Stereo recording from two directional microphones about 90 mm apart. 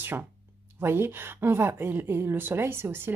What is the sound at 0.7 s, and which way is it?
Speech, 25° right (ahead or behind).